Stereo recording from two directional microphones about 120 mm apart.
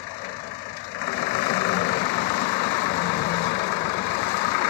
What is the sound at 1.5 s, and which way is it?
Vehicle, 60° left (ahead or behind).